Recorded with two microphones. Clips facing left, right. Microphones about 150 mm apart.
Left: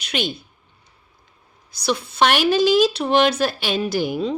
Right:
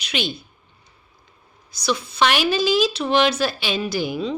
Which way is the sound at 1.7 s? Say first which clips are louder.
Left 1 dB; 60° left (ahead or behind).